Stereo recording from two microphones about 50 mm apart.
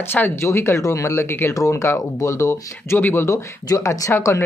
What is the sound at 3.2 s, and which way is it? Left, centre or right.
Speech, left.